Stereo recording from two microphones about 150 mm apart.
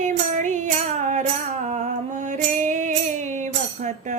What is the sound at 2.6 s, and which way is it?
Music, 55° right (ahead or behind).